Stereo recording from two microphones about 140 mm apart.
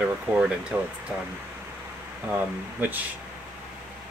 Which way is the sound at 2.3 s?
10° right (ahead or behind).